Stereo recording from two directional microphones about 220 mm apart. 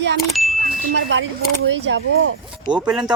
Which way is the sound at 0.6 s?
55° right (ahead or behind).